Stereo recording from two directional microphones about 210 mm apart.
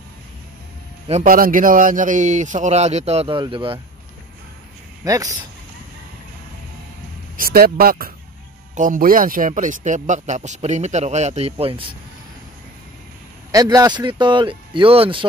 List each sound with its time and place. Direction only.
1.2 s a man's voice: 40° right (ahead or behind); by 3.8 s 25° right (ahead or behind)
5.0 s speech: 15° right (ahead or behind)
7.3 s a man's voice: 45° right (ahead or behind); by 11.9 s 25° right (ahead or behind)
13.5 s speech: 15° right (ahead or behind)